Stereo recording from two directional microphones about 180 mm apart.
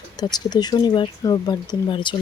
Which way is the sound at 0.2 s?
20° left (ahead or behind).